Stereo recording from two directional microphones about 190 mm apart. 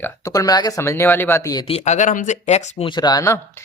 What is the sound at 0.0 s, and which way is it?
Speech, 15° left (ahead or behind).